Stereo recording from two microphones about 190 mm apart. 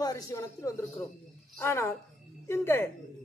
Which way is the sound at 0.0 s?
15° left (ahead or behind).